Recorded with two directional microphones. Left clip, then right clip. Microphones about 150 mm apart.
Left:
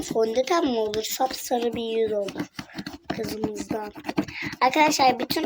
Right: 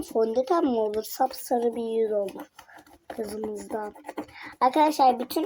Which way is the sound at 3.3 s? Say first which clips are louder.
Left 3 dB; 25° left (ahead or behind).